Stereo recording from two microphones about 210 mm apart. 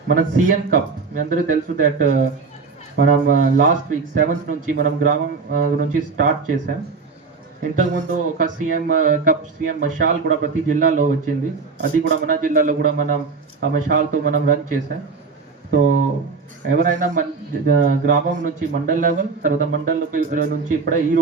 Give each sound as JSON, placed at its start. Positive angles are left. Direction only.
{"t": 0.1, "sound": "speech", "side_deg": -40}
{"t": 7.8, "sound": "speech", "side_deg": -40}